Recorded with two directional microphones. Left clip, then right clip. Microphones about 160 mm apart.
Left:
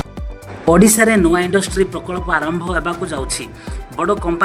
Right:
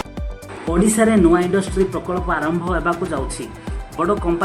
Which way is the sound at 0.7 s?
45° left (ahead or behind).